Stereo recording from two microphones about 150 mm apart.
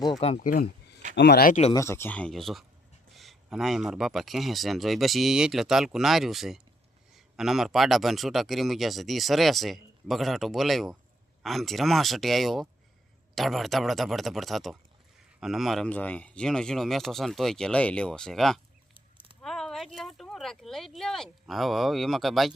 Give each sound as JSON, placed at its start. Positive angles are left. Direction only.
{"t": 0.3, "sound": "speech", "side_deg": 75}
{"t": 1.7, "sound": "a man's voice", "side_deg": 20}
{"t": 15.9, "sound": "a man's voice", "side_deg": 10}
{"t": 18.9, "sound": "a sound", "side_deg": -35}
{"t": 19.4, "sound": "a man's voice", "side_deg": 5}